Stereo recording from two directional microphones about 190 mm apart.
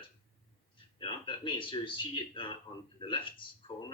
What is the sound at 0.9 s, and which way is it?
Speech, 25° left (ahead or behind).